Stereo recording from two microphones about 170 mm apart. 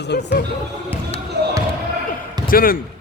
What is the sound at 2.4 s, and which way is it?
Speech, 55° left (ahead or behind).